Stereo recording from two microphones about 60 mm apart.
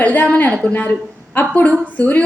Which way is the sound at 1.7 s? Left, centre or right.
Right.